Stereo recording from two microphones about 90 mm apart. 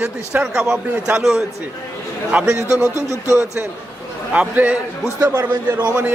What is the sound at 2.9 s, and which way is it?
Speech, 35° left (ahead or behind).